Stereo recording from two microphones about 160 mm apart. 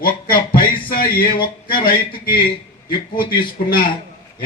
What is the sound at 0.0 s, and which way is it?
Music, 65° left (ahead or behind).